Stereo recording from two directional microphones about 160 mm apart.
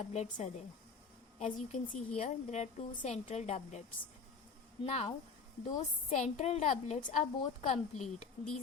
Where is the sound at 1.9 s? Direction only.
45° left (ahead or behind).